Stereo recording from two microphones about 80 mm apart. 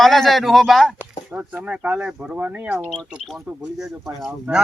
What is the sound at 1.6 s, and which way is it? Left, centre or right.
Speech, centre.